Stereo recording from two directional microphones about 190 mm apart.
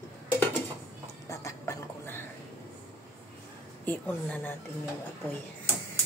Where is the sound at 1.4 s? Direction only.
15° left (ahead or behind).